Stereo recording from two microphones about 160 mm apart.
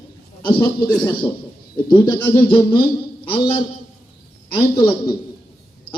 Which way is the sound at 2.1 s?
15° left (ahead or behind).